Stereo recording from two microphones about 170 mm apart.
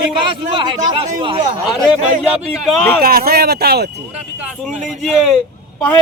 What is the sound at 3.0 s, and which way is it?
Speech, 60° right (ahead or behind).